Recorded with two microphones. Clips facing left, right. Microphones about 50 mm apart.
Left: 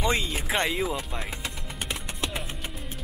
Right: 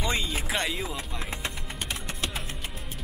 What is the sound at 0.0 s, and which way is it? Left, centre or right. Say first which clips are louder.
Music: left 3 dB; centre.